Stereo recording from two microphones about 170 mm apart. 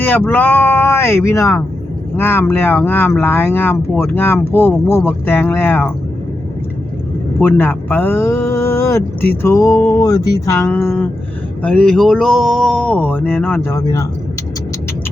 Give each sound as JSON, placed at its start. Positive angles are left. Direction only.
{"t": 0.0, "sound": "speech", "side_deg": 10}
{"t": 7.3, "sound": "speech", "side_deg": 10}